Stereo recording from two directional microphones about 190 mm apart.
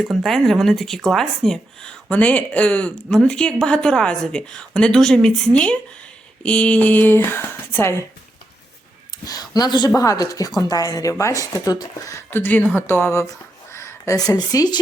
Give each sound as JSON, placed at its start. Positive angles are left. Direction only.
{"t": 0.1, "sound": "speech", "side_deg": 0}
{"t": 9.2, "sound": "a woman's voice", "side_deg": 20}